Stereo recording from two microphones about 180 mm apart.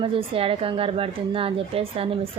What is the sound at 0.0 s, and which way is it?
A woman's voice, 30° right (ahead or behind).